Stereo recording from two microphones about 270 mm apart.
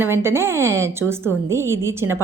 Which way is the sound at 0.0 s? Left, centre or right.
Centre.